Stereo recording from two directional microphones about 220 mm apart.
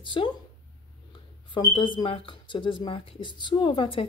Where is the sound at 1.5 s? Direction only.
20° left (ahead or behind).